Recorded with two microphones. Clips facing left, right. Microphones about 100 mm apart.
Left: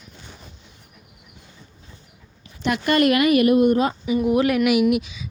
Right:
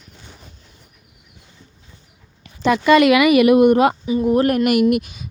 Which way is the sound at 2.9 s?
90° right.